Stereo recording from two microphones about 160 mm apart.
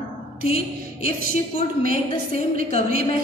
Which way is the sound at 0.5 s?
65° right (ahead or behind).